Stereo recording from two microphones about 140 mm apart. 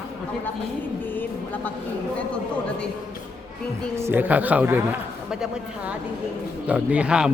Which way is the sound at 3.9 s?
15° right (ahead or behind).